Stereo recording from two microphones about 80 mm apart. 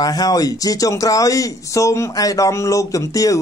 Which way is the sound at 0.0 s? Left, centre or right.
Left.